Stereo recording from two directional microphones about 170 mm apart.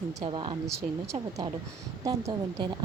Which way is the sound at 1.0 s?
20° right (ahead or behind).